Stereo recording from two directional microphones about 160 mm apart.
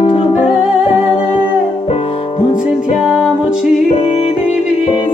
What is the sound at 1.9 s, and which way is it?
Music, 35° left (ahead or behind).